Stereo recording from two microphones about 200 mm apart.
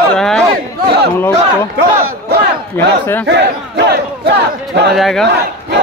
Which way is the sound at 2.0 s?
50° right (ahead or behind).